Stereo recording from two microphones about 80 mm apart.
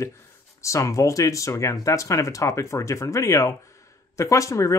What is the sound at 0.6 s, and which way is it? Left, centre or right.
Speech, left.